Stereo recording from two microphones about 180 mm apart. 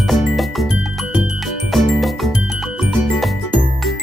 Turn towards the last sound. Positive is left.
turn(degrees=0)  # may be behind; listen again after turning